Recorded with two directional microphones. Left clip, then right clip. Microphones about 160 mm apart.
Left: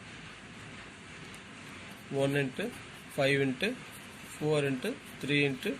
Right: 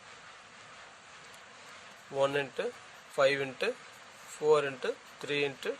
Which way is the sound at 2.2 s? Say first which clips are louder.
Right 1 dB; 80° right.